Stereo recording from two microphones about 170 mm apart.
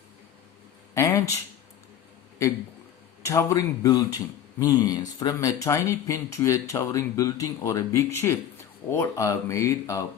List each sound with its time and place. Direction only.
0.9 s speech: 20° left (ahead or behind)
3.2 s speech: 20° left (ahead or behind)